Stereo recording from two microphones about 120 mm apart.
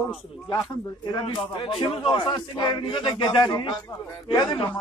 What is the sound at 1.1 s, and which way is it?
Speech, 35° left (ahead or behind).